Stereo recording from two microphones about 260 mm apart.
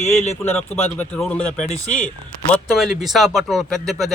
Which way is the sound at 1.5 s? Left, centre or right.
Left.